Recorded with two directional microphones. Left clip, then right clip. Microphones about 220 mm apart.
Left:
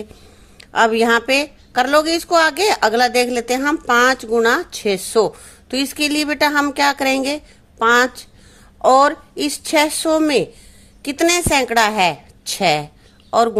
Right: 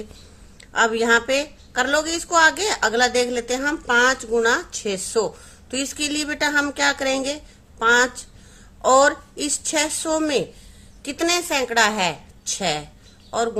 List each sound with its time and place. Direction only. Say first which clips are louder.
0.6 s a woman's voice: left 5 dB; 35° left (ahead or behind)